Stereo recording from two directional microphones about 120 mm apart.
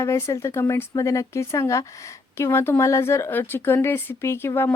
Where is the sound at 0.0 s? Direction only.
25° left (ahead or behind).